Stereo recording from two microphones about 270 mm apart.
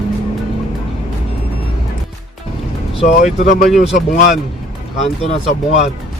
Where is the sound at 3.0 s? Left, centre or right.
Left.